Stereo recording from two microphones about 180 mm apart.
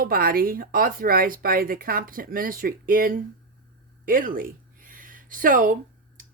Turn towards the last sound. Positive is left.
turn(degrees=-50)  # may be behind; listen again after turning